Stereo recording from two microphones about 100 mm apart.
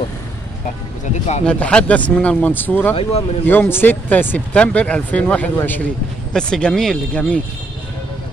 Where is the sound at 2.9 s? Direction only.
70° left (ahead or behind).